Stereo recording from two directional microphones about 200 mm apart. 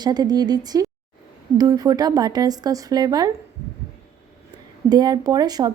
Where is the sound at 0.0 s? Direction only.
20° right (ahead or behind).